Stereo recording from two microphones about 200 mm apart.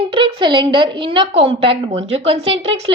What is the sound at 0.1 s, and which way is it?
A woman's voice, 25° right (ahead or behind).